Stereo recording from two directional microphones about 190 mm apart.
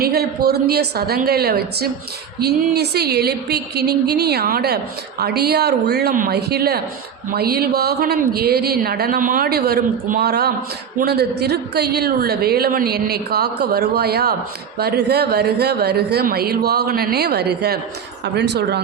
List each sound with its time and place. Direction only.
0.0 s a woman's voice: 55° right (ahead or behind)